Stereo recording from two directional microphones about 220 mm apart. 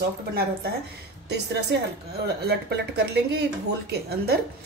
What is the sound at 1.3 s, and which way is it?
Speech, 50° right (ahead or behind).